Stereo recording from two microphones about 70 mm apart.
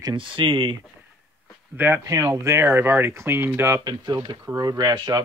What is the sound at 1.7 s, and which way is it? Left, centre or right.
Speech, right.